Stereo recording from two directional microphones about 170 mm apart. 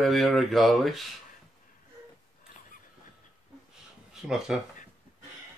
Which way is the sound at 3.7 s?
5° right (ahead or behind).